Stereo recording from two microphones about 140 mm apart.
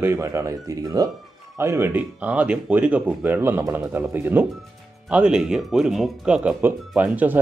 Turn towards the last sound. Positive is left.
turn(degrees=-10)  # may be behind; listen again after turning